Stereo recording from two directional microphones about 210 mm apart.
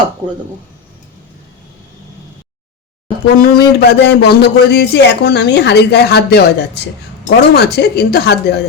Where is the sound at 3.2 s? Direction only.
50° left (ahead or behind).